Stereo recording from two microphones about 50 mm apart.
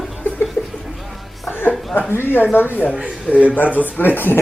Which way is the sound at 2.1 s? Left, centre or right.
Left.